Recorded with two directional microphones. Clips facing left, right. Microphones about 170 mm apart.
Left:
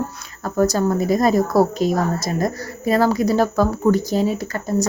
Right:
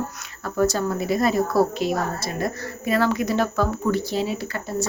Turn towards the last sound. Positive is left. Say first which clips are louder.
# left 5 dB
turn(degrees=40)  # may be behind; listen again after turning